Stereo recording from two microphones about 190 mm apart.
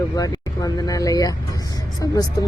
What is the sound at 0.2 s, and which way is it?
A woman's voice, 20° left (ahead or behind).